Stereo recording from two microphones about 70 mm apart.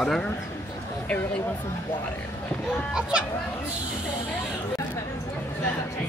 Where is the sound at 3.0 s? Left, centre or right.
Centre.